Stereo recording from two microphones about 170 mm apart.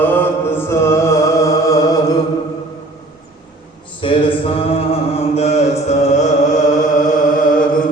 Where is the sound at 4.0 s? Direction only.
30° left (ahead or behind).